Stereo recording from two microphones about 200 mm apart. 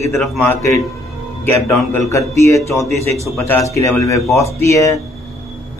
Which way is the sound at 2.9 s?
30° right (ahead or behind).